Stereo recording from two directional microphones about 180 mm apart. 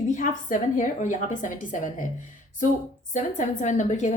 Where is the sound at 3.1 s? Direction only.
45° left (ahead or behind).